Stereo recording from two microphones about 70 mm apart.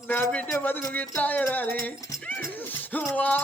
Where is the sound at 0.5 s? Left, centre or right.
Left.